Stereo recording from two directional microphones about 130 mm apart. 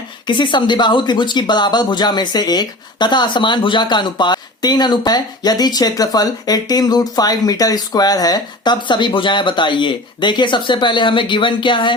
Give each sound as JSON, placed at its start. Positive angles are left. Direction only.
{"t": 0.3, "sound": "speech", "side_deg": 35}